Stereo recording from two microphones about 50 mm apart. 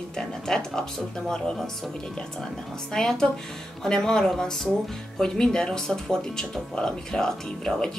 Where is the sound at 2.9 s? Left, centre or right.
Centre.